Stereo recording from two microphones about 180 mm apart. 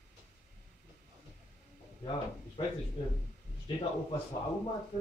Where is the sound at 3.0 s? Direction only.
30° left (ahead or behind).